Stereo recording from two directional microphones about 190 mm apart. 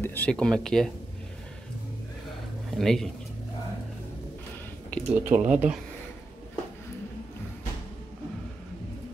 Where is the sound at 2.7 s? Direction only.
Centre (ahead or behind).